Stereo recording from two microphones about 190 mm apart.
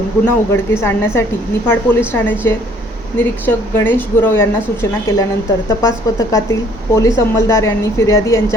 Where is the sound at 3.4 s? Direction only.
10° left (ahead or behind).